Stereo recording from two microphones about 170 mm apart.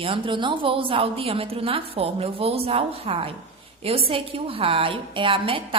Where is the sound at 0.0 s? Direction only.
30° right (ahead or behind).